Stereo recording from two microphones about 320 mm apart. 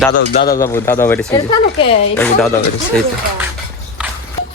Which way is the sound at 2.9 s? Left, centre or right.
Centre.